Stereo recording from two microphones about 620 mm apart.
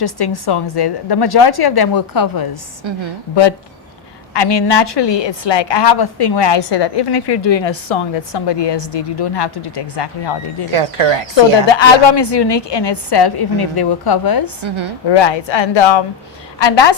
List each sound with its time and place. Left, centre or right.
0.0 s a woman's voice: left
4.4 s a woman's voice: left
10.7 s speech: right
11.8 s a woman's voice: left
14.6 s speech: right
15.1 s a woman's voice: left